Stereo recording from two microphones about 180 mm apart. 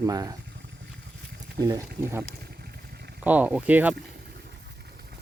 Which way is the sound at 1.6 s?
15° right (ahead or behind).